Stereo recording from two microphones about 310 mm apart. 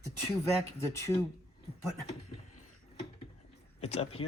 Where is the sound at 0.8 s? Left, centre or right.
Centre.